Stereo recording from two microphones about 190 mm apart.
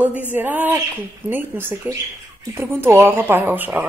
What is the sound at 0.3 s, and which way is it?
A woman's voice, 10° right (ahead or behind).